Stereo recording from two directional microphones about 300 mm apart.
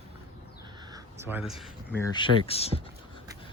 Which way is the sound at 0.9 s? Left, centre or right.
Centre.